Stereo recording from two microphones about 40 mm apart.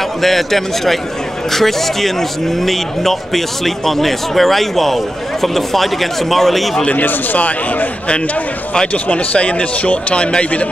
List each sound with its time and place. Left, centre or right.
0.2 s speech: centre
7.0 s speech: left
8.9 s speech: left